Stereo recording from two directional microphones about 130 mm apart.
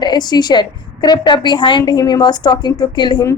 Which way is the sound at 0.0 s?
35° left (ahead or behind).